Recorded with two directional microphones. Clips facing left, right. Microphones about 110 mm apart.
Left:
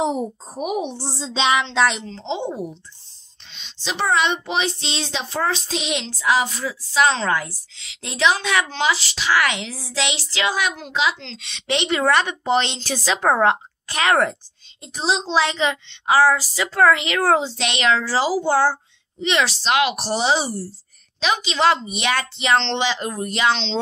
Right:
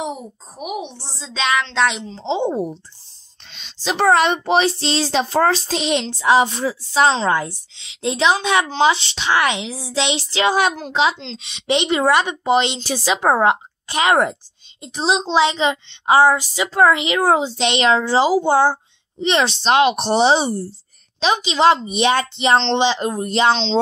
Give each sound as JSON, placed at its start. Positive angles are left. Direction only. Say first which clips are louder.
{"t": 0.0, "sound": "a child's voice", "louder": "left 5 dB", "side_deg": 30}
{"t": 1.8, "sound": "a woman's voice", "louder": "even", "side_deg": 0}
{"t": 2.0, "sound": "a woman's voice", "louder": "right 5 dB", "side_deg": -15}
{"t": 3.5, "sound": "speech", "louder": "right 5 dB", "side_deg": -45}
{"t": 7.1, "sound": "a woman's voice", "louder": "right 3 dB", "side_deg": -20}
{"t": 10.0, "sound": "a woman's voice", "louder": "right 5 dB", "side_deg": -25}
{"t": 10.5, "sound": "a woman's voice", "louder": "right 5 dB", "side_deg": -35}
{"t": 19.2, "sound": "a woman's voice", "louder": "right 3 dB", "side_deg": -30}